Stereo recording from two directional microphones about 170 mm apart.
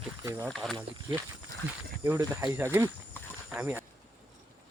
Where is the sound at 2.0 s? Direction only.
15° right (ahead or behind).